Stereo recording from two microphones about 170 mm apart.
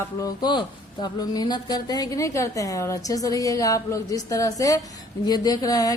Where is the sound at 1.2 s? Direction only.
25° left (ahead or behind).